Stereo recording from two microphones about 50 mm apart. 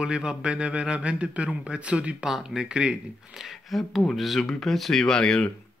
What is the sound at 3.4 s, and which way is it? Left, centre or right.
Speech, centre.